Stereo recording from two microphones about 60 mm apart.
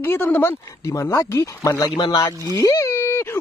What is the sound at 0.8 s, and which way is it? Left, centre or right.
Speech, left.